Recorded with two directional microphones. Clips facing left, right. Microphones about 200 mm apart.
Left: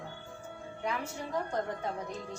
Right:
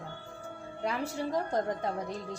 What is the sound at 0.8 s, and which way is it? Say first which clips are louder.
A woman's voice: right 4 dB; 35° right (ahead or behind).